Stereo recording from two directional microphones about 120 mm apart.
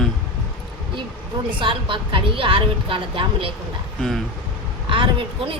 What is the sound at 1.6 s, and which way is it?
Speech, 45° right (ahead or behind).